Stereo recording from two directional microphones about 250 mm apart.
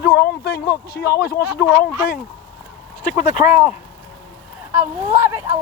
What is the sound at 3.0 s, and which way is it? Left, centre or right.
Speech, left.